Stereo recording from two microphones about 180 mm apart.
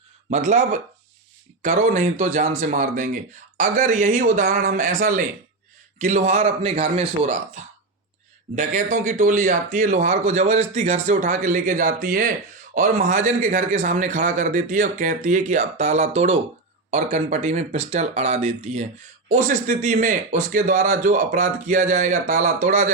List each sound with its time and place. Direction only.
0.3 s a man's voice: 40° right (ahead or behind)